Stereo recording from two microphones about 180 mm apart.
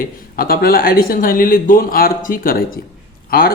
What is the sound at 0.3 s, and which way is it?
Speech, 55° left (ahead or behind).